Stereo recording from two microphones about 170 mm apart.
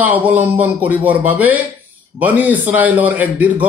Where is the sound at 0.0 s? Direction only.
10° right (ahead or behind).